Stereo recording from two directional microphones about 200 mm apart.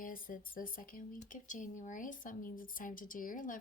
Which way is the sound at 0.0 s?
45° left (ahead or behind).